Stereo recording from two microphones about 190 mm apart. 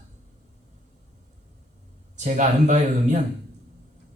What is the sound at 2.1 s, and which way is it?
A man's voice, 40° right (ahead or behind).